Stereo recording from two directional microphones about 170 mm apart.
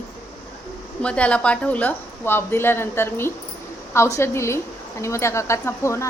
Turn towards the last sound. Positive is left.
turn(degrees=15)  # may be behind; listen again after turning